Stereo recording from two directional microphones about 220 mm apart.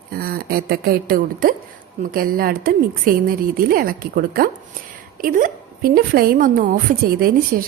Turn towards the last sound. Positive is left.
turn(degrees=-45)  # may be behind; listen again after turning